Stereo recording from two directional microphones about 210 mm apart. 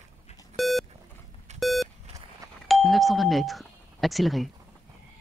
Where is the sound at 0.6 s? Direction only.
Centre (ahead or behind).